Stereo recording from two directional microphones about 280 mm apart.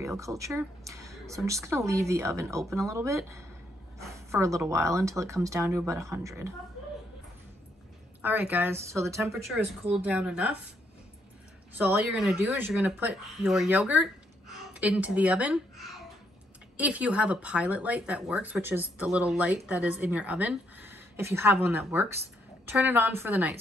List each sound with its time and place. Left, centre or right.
0.0 s a woman's voice: centre
8.2 s a woman's voice: centre
11.8 s speech: centre
16.7 s a woman's voice: centre